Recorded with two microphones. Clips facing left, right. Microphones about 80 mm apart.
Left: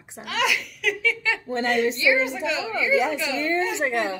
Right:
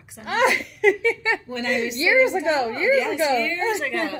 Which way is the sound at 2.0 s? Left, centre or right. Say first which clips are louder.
Right 4 dB; right.